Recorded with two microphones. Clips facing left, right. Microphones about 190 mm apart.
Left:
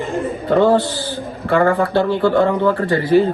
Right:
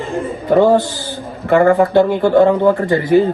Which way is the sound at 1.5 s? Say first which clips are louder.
Right 4 dB; 20° right (ahead or behind).